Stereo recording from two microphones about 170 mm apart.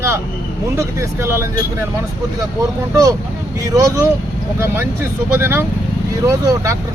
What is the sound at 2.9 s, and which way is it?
Speech, 20° right (ahead or behind).